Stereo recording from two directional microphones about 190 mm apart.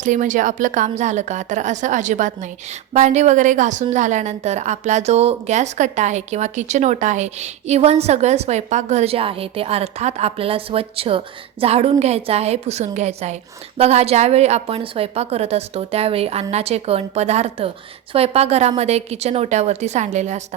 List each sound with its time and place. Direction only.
0.0 s a woman's voice: 40° right (ahead or behind)